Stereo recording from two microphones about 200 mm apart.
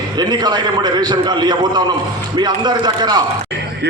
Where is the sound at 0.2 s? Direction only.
20° right (ahead or behind).